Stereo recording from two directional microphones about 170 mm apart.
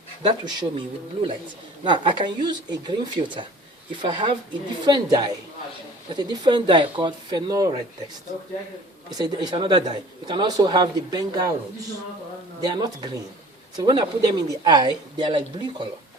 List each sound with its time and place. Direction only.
0.2 s a man's voice: 25° right (ahead or behind)
9.1 s a man's voice: 25° right (ahead or behind)
12.6 s a man's voice: 25° right (ahead or behind)